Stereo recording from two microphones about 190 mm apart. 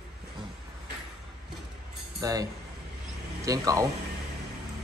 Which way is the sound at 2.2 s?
20° right (ahead or behind).